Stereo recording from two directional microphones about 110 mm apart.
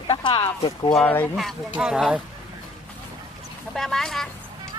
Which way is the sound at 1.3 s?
Centre (ahead or behind).